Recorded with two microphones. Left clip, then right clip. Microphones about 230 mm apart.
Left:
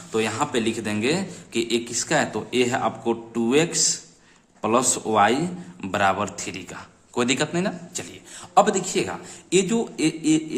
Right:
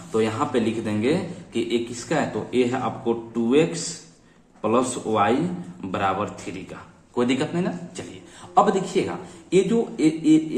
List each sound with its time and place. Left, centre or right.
0.1 s speech: left